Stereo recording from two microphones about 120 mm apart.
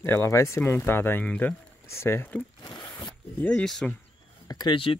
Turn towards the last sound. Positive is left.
turn(degrees=45)  # may be behind; listen again after turning